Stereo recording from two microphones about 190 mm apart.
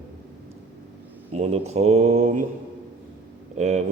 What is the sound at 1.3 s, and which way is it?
Speech, 35° right (ahead or behind).